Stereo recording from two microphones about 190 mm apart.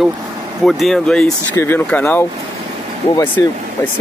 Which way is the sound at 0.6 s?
Centre (ahead or behind).